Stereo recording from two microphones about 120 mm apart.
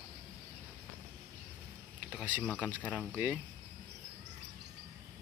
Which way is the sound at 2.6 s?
10° right (ahead or behind).